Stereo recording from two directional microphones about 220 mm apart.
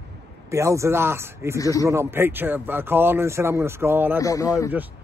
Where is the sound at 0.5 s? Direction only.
15° right (ahead or behind).